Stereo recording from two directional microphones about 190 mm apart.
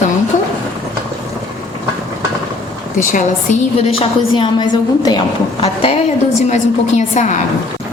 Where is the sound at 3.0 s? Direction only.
40° left (ahead or behind).